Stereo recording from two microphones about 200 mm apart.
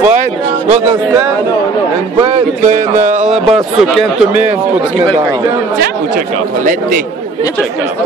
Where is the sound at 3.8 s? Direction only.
Centre (ahead or behind).